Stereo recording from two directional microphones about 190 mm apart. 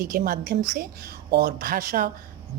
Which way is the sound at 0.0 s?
50° right (ahead or behind).